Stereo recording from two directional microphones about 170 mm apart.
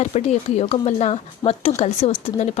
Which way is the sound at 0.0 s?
40° left (ahead or behind).